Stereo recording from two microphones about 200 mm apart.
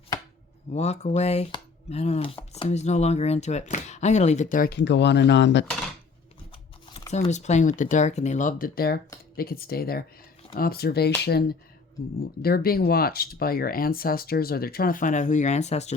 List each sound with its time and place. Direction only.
0.7 s speech: 35° left (ahead or behind); by 5.6 s 60° left (ahead or behind)
7.3 s speech: 35° left (ahead or behind)